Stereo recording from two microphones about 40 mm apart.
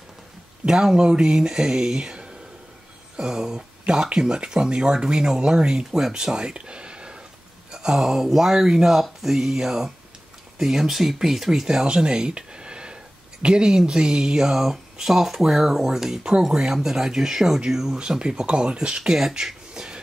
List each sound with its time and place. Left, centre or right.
0.7 s speech: centre
7.7 s speech: centre
11.8 s speech: right
16.2 s speech: right
17.9 s speech: right